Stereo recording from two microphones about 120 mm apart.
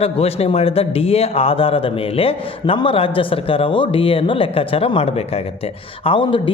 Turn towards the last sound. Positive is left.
turn(degrees=45)  # may be behind; listen again after turning